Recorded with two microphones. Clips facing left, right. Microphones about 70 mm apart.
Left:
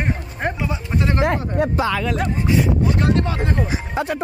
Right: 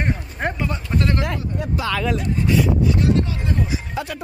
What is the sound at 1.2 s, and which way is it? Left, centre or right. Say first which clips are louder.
Speech: left 7 dB; left.